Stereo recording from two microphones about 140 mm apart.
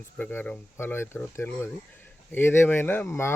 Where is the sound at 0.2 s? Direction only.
15° left (ahead or behind).